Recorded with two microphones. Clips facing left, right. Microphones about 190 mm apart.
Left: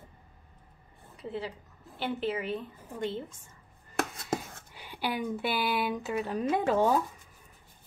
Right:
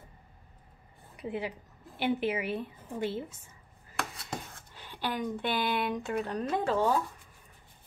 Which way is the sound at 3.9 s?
45° left (ahead or behind).